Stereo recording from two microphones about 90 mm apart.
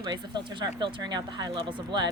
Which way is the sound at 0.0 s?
55° right (ahead or behind).